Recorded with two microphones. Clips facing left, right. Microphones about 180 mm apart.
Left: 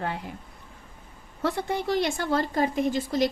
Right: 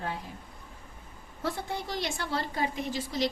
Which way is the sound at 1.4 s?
70° left (ahead or behind).